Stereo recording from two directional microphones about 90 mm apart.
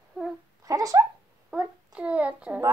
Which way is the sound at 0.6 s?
40° right (ahead or behind).